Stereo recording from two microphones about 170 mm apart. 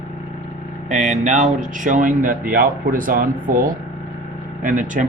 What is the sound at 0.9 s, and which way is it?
Speech, 45° right (ahead or behind).